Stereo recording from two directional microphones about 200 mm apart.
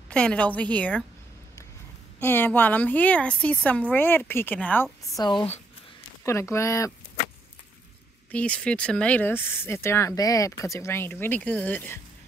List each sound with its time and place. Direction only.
0.1 s speech: 5° left (ahead or behind)
2.1 s speech: 10° left (ahead or behind)
5.2 s speech: 25° left (ahead or behind)
6.2 s speech: 15° left (ahead or behind)
8.3 s speech: 5° left (ahead or behind)